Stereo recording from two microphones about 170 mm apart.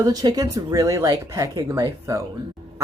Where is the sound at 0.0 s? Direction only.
20° right (ahead or behind).